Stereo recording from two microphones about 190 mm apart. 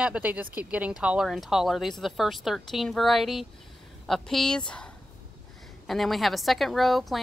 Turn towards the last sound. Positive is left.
turn(degrees=0)  # may be behind; listen again after turning